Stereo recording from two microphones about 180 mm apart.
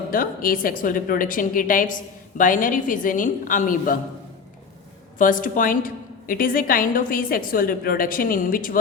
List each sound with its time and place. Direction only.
0.1 s a woman's voice: 50° left (ahead or behind)
5.1 s a woman's voice: 45° left (ahead or behind)